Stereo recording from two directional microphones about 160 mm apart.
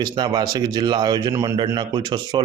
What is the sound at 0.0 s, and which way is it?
Speech, 25° right (ahead or behind).